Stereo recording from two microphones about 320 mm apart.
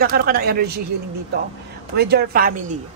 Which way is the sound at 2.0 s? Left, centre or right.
Right.